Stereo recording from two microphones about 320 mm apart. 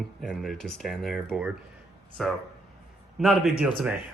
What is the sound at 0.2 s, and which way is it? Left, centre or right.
A man's voice, centre.